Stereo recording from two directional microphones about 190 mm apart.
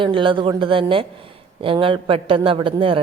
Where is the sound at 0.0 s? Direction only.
25° right (ahead or behind).